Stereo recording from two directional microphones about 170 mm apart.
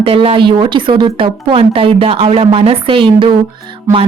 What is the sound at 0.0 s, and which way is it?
Speech, 35° right (ahead or behind).